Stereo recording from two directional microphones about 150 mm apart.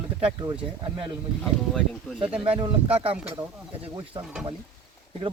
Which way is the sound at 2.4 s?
40° right (ahead or behind).